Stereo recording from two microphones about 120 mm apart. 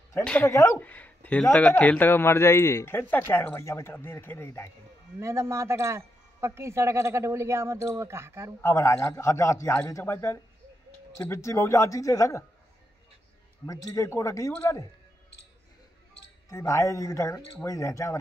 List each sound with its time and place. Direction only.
0.2 s speech: 10° left (ahead or behind)
0.5 s a man's voice: 25° left (ahead or behind)
0.7 s a man's voice: 15° left (ahead or behind)
5.2 s speech: 25° right (ahead or behind)
8.5 s a man's voice: 20° left (ahead or behind)
13.7 s a man's voice: 30° left (ahead or behind)
16.4 s a man's voice: 25° left (ahead or behind)